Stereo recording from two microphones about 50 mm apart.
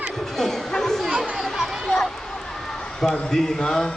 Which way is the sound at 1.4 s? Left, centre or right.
Centre.